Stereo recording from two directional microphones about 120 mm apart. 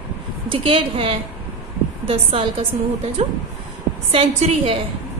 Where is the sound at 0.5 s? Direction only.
50° right (ahead or behind).